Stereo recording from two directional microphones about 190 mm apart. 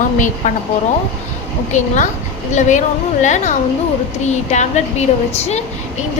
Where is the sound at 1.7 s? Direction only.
40° left (ahead or behind).